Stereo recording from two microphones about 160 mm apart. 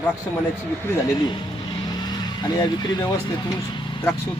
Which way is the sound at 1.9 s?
25° left (ahead or behind).